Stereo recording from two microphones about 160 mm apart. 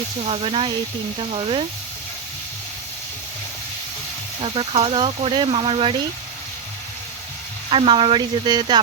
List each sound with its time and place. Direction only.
0.2 s speech: 35° right (ahead or behind)
4.4 s speech: 35° right (ahead or behind)
7.7 s speech: 35° right (ahead or behind)